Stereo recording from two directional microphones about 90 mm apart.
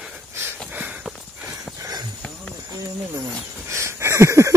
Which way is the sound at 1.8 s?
45° right (ahead or behind).